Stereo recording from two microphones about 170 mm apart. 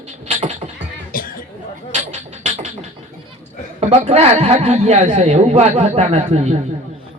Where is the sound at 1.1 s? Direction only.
55° left (ahead or behind).